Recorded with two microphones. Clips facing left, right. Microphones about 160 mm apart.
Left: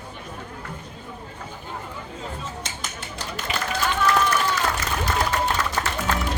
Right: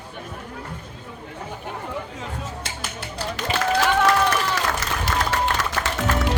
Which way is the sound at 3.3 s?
90° right.